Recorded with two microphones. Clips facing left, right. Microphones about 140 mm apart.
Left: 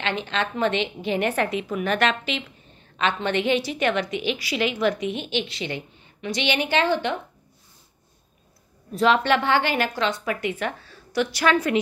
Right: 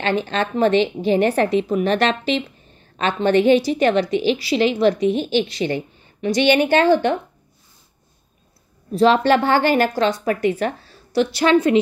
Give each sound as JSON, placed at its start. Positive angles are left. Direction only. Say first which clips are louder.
{"t": 0.0, "sound": "a woman's voice", "louder": "right 6 dB", "side_deg": -40}
{"t": 8.9, "sound": "a woman's voice", "louder": "right 5 dB", "side_deg": -35}